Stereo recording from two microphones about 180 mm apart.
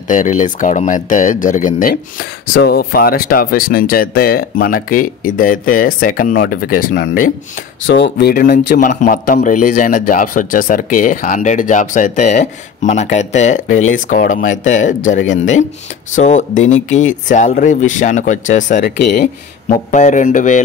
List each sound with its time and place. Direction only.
0.1 s speech: 45° left (ahead or behind)
7.8 s speech: 80° left; by 19.2 s 55° left (ahead or behind)
19.9 s speech: 45° left (ahead or behind)